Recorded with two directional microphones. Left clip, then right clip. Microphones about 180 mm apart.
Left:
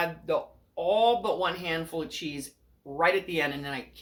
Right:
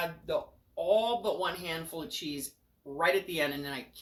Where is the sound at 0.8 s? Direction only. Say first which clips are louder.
Left 4 dB; 15° left (ahead or behind).